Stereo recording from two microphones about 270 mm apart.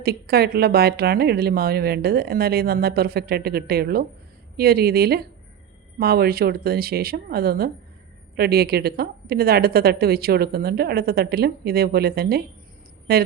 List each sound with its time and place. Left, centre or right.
0.0 s a woman's voice: right